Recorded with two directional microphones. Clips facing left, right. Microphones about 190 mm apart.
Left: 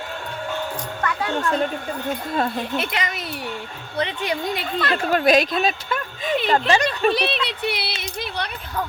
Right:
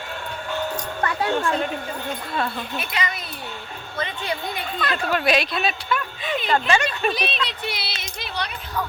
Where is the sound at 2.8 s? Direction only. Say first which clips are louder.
Left 2 dB; 90° left.